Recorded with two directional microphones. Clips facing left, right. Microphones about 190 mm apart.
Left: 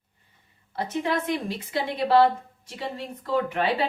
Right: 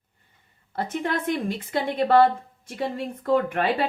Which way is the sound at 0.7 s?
50° right (ahead or behind).